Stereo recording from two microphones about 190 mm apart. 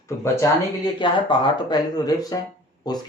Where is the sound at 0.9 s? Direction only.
25° left (ahead or behind).